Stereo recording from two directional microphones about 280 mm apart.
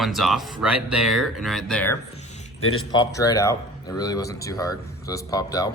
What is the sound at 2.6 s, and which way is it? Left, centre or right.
Speech, left.